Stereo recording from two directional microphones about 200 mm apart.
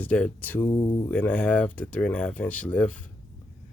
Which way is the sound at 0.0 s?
5° left (ahead or behind).